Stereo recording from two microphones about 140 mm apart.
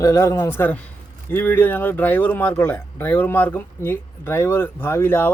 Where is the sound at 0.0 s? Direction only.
20° left (ahead or behind).